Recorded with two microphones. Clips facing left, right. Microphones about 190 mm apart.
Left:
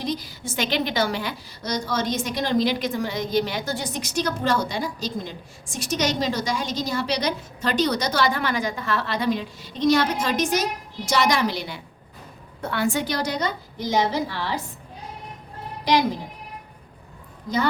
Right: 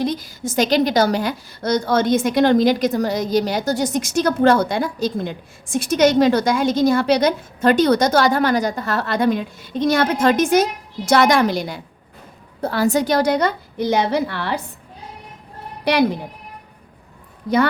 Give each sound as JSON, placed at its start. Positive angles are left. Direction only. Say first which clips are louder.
{"t": 0.0, "sound": "a woman's voice", "louder": "right 6 dB", "side_deg": -50}
{"t": 15.8, "sound": "a woman's voice", "louder": "right 4 dB", "side_deg": -65}